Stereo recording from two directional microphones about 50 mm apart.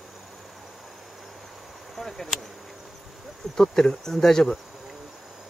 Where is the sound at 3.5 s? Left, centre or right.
Centre.